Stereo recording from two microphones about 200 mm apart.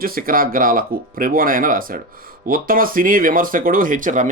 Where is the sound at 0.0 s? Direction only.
45° right (ahead or behind).